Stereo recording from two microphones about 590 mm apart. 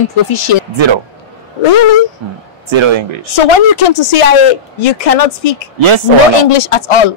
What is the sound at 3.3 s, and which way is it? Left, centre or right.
Speech, left.